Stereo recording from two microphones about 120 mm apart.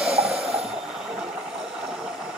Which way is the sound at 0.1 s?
55° right (ahead or behind).